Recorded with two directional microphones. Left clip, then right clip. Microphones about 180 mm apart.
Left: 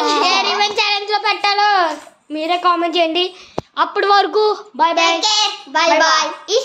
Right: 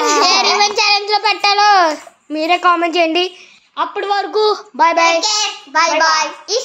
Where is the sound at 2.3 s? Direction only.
25° right (ahead or behind).